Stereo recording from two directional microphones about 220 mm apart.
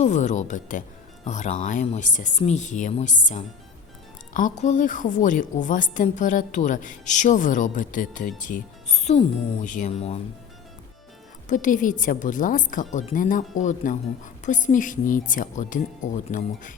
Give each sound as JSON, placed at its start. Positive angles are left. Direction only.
{"t": 0.0, "sound": "a woman's voice", "side_deg": 35}
{"t": 11.4, "sound": "a woman's voice", "side_deg": 35}